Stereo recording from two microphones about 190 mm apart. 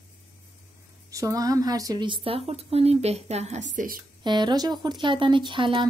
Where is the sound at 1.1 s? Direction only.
20° right (ahead or behind).